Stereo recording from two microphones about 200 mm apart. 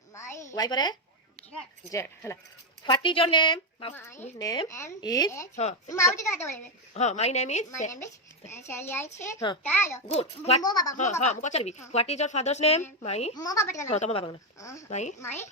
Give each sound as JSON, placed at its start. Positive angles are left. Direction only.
{"t": 0.1, "sound": "a sound", "side_deg": 15}
{"t": 0.5, "sound": "a woman's voice", "side_deg": 20}
{"t": 3.9, "sound": "speech", "side_deg": 15}
{"t": 6.9, "sound": "speech", "side_deg": 35}
{"t": 8.4, "sound": "speech", "side_deg": 15}
{"t": 10.1, "sound": "speech", "side_deg": 30}
{"t": 10.6, "sound": "a woman's voice", "side_deg": 20}
{"t": 10.9, "sound": "speech", "side_deg": 35}
{"t": 13.3, "sound": "speech", "side_deg": 20}
{"t": 13.8, "sound": "speech", "side_deg": 35}
{"t": 14.6, "sound": "speech", "side_deg": 15}
{"t": 14.8, "sound": "speech", "side_deg": 35}
{"t": 15.2, "sound": "speech", "side_deg": 10}